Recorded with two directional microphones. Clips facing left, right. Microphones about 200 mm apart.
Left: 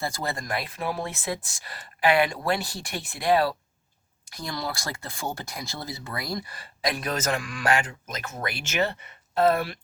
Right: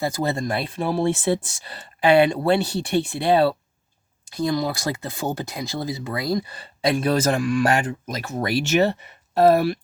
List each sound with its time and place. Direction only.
0.0 s speech: 20° right (ahead or behind); by 9.7 s 40° right (ahead or behind)